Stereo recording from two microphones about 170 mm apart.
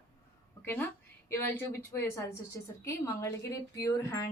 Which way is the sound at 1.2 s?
15° left (ahead or behind).